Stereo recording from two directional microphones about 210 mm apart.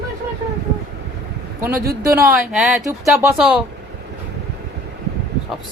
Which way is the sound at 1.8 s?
45° right (ahead or behind).